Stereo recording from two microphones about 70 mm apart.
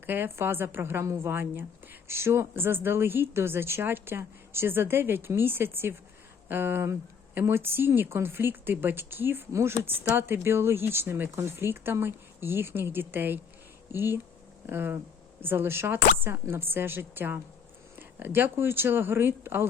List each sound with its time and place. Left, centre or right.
0.0 s a woman's voice: right
9.5 s speech: right
9.8 s a woman's voice: right